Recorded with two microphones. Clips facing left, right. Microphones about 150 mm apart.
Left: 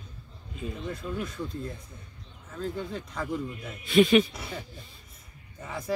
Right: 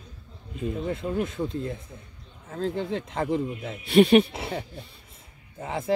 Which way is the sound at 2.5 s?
70° right (ahead or behind).